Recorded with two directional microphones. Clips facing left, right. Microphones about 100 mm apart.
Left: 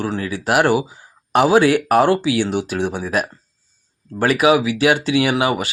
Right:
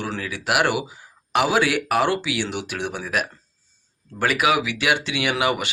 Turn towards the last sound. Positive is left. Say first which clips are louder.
# left 5 dB
turn(degrees=35)  # may be behind; listen again after turning